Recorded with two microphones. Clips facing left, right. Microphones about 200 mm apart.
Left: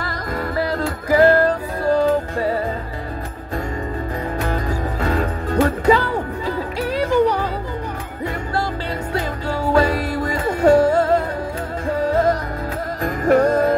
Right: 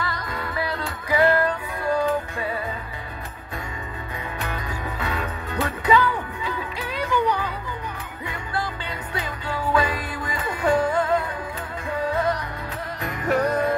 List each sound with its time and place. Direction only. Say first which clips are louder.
0.6 s music: left 7 dB; 45° left (ahead or behind)
5.0 s music: left 9 dB; 45° left (ahead or behind)
9.1 s music: left 5 dB; 40° left (ahead or behind)